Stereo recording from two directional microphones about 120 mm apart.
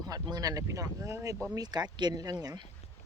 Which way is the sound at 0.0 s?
35° right (ahead or behind).